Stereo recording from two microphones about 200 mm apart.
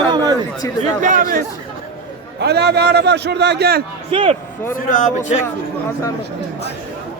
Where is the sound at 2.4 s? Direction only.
55° right (ahead or behind).